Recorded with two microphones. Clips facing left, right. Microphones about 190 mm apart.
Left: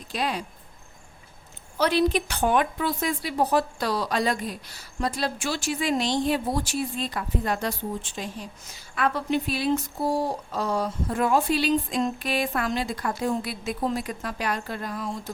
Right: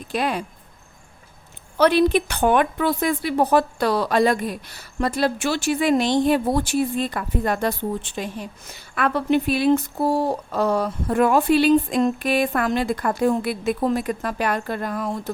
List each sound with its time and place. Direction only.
0.1 s a woman's voice: 55° right (ahead or behind)
1.8 s a woman's voice: 60° right (ahead or behind)